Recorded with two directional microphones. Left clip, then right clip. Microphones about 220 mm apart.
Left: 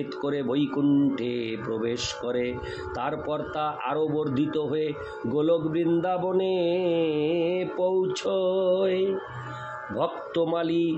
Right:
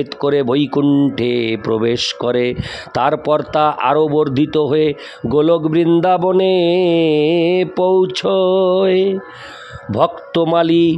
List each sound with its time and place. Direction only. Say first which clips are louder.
0.2 s speech: right 12 dB; 50° right (ahead or behind)